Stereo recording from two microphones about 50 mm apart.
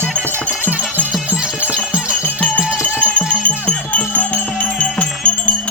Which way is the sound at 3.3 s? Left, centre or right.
Left.